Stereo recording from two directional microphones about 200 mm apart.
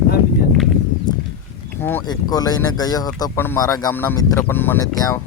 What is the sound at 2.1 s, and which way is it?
Speech, 20° left (ahead or behind).